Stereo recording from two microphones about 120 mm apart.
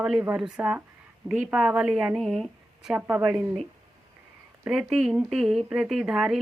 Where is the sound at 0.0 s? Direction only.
5° right (ahead or behind).